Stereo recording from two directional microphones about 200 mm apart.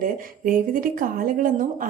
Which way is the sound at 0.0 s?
45° right (ahead or behind).